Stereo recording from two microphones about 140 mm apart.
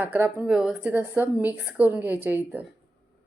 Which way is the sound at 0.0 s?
15° right (ahead or behind).